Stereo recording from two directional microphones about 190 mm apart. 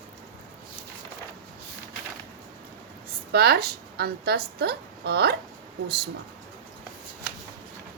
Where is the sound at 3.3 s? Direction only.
55° right (ahead or behind).